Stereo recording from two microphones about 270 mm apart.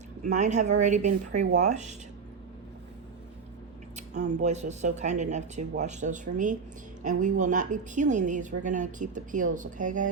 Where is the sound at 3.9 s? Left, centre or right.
Right.